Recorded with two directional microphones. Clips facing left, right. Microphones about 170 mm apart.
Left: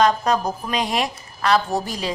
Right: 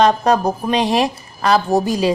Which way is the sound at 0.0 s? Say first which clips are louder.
Right 4 dB; 35° right (ahead or behind).